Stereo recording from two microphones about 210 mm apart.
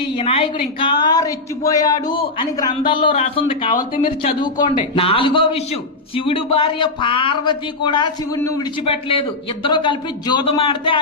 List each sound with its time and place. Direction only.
0.0 s a man's voice: 25° left (ahead or behind)
8.8 s a man's voice: 25° left (ahead or behind)